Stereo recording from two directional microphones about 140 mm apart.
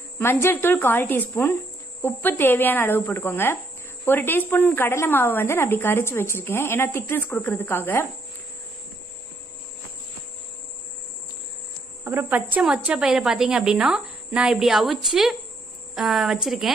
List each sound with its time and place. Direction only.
0.2 s a woman's voice: 15° left (ahead or behind)
12.0 s a woman's voice: 15° right (ahead or behind)